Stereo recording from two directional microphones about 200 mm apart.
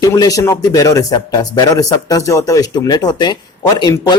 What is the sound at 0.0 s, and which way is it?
Speech, 20° left (ahead or behind).